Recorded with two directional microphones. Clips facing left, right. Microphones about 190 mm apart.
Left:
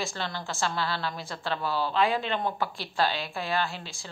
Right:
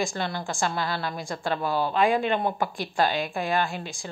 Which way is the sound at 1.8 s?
15° right (ahead or behind).